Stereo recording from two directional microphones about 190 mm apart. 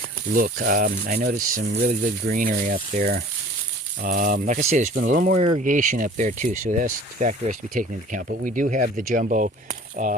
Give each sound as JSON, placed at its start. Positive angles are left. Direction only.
{"t": 0.3, "sound": "speech", "side_deg": -45}